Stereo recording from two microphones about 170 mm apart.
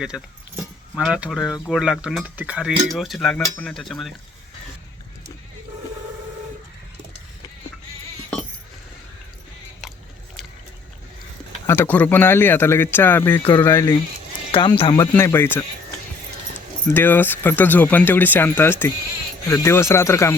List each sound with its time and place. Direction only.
0.0 s speech: 5° right (ahead or behind)
11.6 s speech: 15° left (ahead or behind)
14.5 s speech: 30° left (ahead or behind)
15.1 s speech: 15° left (ahead or behind)
16.9 s speech: 10° left (ahead or behind)